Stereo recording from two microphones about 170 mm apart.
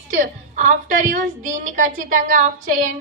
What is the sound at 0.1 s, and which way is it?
A woman's voice, 50° right (ahead or behind).